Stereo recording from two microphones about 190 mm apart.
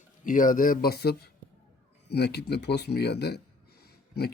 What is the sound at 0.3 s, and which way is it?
Speech, 45° left (ahead or behind).